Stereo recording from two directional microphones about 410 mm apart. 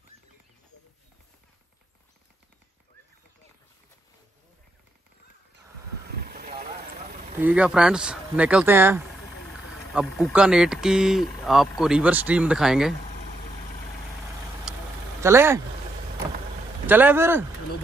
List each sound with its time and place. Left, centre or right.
6.2 s vehicle: right
7.3 s speech: centre
14.7 s vehicle: centre
15.1 s speech: centre
16.8 s speech: centre